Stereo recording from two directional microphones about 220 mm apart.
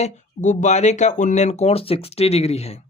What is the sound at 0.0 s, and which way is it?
Speech, 35° left (ahead or behind).